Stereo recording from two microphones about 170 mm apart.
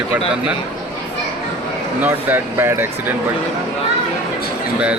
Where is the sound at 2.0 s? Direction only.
10° right (ahead or behind).